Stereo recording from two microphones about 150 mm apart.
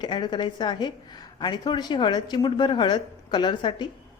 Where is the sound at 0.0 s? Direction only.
30° left (ahead or behind).